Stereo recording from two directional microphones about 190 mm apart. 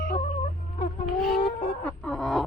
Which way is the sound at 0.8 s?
35° left (ahead or behind).